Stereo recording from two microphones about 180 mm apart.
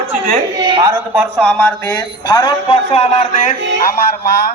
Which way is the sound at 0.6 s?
25° right (ahead or behind).